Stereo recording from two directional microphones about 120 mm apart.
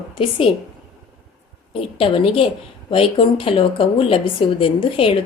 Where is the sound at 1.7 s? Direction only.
50° left (ahead or behind).